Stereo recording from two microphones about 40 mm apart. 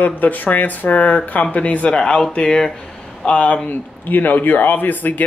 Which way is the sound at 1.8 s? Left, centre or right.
Left.